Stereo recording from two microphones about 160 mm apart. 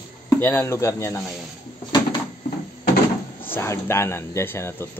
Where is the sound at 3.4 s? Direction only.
15° left (ahead or behind).